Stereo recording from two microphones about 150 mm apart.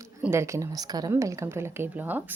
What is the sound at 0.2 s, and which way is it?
A woman's voice, 15° right (ahead or behind).